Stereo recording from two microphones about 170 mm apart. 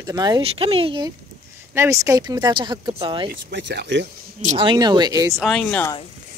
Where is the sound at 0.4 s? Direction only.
35° right (ahead or behind).